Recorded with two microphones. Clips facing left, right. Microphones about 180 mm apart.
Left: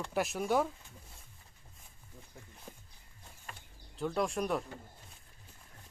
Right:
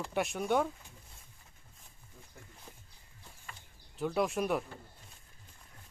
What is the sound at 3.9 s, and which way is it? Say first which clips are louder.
Speech: right 1 dB; 5° right (ahead or behind).